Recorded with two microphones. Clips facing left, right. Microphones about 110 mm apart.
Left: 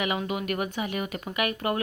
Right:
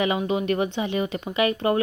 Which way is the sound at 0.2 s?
25° right (ahead or behind).